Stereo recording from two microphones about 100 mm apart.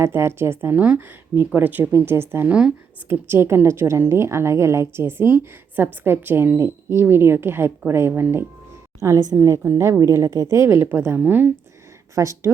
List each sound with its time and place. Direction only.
0.0 s a woman's voice: 25° right (ahead or behind)
12.1 s speech: 35° right (ahead or behind)